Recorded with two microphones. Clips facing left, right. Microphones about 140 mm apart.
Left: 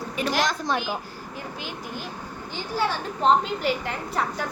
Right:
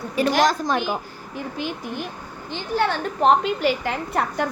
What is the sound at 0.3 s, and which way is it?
A woman's voice, 45° right (ahead or behind).